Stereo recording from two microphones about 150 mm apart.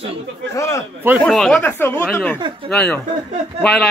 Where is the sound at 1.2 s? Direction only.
5° left (ahead or behind).